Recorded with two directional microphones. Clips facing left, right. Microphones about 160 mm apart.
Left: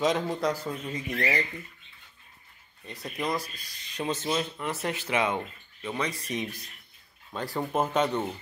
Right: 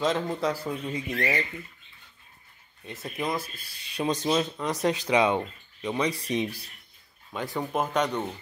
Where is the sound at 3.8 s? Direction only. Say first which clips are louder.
Right 3 dB; 10° right (ahead or behind).